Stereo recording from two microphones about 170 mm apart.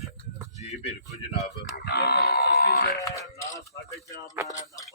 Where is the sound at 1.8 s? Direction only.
70° left (ahead or behind).